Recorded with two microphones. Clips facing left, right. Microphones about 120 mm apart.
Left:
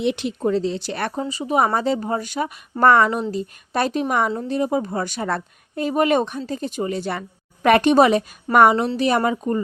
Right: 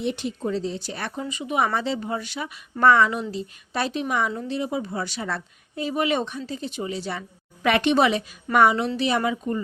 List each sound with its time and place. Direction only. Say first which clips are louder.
0.0 s speech: left 5 dB; 80° left
1.1 s a woman's voice: left 4 dB; 35° left (ahead or behind)